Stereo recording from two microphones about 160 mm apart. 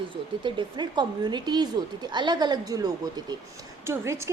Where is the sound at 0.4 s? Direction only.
30° right (ahead or behind).